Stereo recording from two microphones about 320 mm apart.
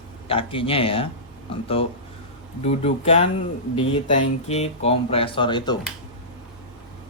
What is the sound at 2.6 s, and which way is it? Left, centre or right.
Speech, centre.